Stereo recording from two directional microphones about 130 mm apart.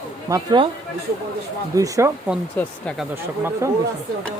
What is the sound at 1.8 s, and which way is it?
Speech, 25° right (ahead or behind).